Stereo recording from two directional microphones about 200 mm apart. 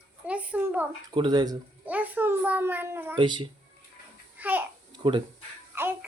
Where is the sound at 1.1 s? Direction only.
20° right (ahead or behind).